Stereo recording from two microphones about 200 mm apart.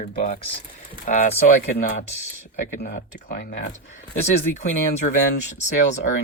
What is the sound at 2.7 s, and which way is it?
Speech, 45° left (ahead or behind).